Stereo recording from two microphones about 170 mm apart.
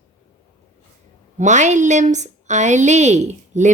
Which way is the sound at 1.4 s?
45° right (ahead or behind).